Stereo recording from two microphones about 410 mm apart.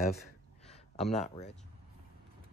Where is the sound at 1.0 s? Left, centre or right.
Centre.